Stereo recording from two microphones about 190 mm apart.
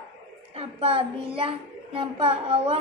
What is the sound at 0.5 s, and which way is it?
A child's voice, 30° right (ahead or behind).